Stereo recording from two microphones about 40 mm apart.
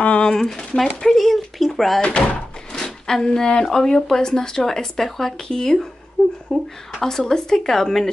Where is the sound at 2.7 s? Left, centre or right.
Centre.